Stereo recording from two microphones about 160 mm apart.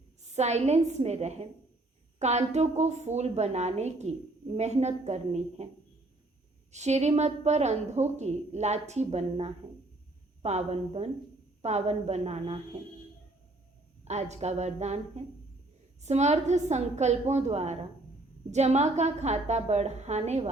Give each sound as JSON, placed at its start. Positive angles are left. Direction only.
{"t": 0.3, "sound": "a woman's voice", "side_deg": -45}
{"t": 6.7, "sound": "a woman's voice", "side_deg": -45}
{"t": 14.0, "sound": "a woman's voice", "side_deg": -45}